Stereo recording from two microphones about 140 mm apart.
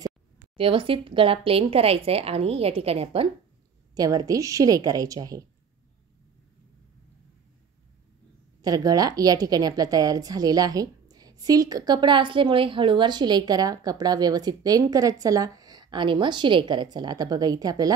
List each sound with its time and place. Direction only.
0.6 s speech: 40° right (ahead or behind)
3.9 s a woman's voice: 25° right (ahead or behind)
8.6 s a woman's voice: 25° right (ahead or behind)